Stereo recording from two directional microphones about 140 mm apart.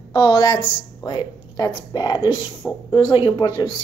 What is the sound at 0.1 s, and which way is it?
A woman's voice, 30° left (ahead or behind).